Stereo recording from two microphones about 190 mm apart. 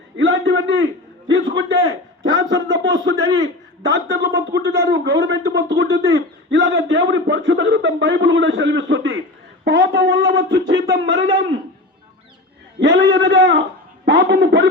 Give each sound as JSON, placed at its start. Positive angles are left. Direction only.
{"t": 0.2, "sound": "a man's voice", "side_deg": -75}
{"t": 1.3, "sound": "a man's voice", "side_deg": -85}
{"t": 2.2, "sound": "a sound", "side_deg": -20}
{"t": 2.5, "sound": "speech", "side_deg": -75}
{"t": 4.3, "sound": "speech", "side_deg": -75}
{"t": 4.9, "sound": "speech", "side_deg": -90}
{"t": 12.8, "sound": "speech", "side_deg": -70}